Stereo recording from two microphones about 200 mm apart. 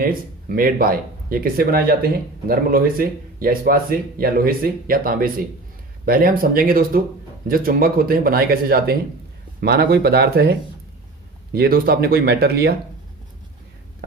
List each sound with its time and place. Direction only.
0.0 s speech: 45° right (ahead or behind)